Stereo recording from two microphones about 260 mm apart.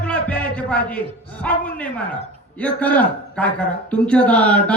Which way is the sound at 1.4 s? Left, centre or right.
Centre.